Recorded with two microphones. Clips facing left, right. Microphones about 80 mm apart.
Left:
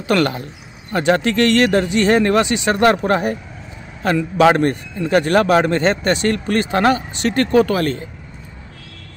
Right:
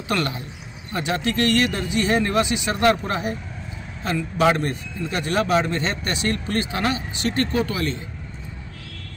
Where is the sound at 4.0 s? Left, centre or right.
Left.